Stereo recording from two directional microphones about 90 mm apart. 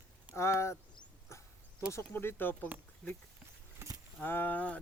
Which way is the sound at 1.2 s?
30° left (ahead or behind).